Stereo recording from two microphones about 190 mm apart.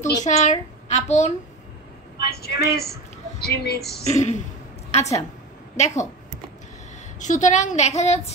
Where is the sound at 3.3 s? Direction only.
55° left (ahead or behind).